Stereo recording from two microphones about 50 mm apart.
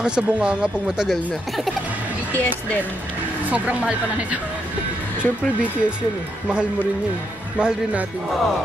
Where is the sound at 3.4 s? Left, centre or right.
Right.